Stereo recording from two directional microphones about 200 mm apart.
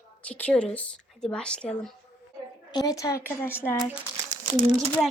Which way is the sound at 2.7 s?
20° left (ahead or behind).